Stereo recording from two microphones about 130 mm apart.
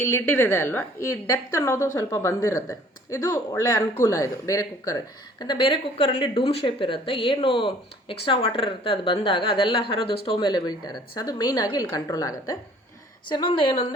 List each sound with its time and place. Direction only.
0.0 s speech: 20° left (ahead or behind); by 5.6 s 35° left (ahead or behind)
5.6 s a woman's voice: 45° left (ahead or behind); by 12.5 s 30° left (ahead or behind)
13.2 s speech: 40° left (ahead or behind)